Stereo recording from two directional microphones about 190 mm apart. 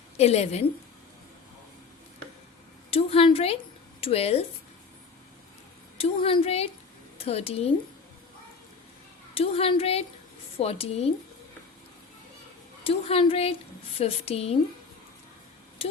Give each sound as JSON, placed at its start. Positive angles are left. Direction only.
{"t": 0.2, "sound": "a woman's voice", "side_deg": 35}
{"t": 2.9, "sound": "a woman's voice", "side_deg": 30}
{"t": 6.0, "sound": "a woman's voice", "side_deg": 30}
{"t": 9.3, "sound": "a woman's voice", "side_deg": 30}
{"t": 12.8, "sound": "a woman's voice", "side_deg": 30}